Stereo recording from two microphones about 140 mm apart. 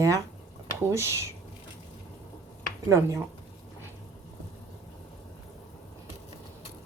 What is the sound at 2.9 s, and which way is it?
Speech, 20° right (ahead or behind).